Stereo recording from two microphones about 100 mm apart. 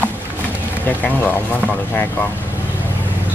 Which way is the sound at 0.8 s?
15° left (ahead or behind).